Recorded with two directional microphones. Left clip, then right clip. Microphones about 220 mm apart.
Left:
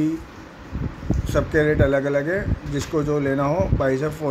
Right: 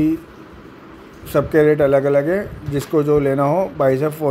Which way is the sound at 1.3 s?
20° right (ahead or behind).